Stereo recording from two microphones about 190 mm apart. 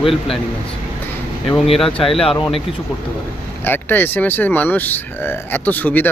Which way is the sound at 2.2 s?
30° left (ahead or behind).